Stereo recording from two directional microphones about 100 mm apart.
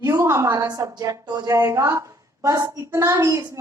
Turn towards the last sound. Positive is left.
turn(degrees=-35)  # may be behind; listen again after turning